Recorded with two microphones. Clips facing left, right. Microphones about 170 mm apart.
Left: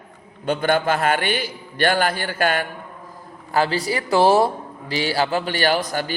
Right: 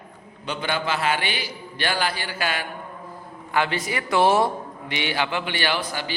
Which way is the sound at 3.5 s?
35° left (ahead or behind).